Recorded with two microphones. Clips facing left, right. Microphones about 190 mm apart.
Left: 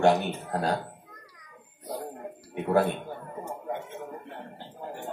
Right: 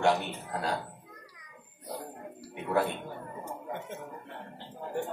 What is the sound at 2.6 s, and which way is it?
Speech, 45° left (ahead or behind).